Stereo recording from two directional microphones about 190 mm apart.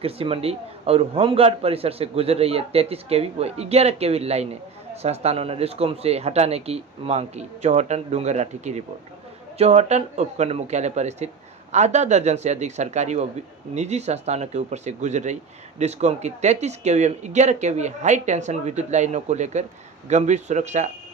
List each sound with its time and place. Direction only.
0.0 s a man's voice: 30° right (ahead or behind)